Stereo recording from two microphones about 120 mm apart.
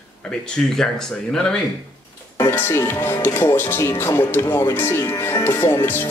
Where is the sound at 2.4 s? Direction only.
20° left (ahead or behind).